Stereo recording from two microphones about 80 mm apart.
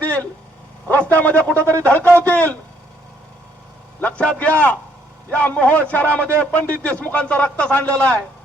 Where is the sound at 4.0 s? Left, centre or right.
Centre.